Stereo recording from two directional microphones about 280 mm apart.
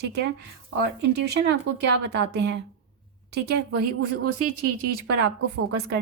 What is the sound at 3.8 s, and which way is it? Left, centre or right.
Speech, right.